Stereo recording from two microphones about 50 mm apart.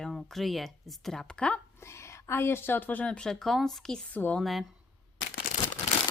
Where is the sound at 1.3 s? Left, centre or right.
Centre.